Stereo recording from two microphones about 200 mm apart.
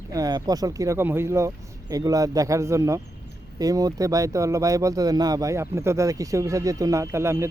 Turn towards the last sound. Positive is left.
turn(degrees=-15)  # may be behind; listen again after turning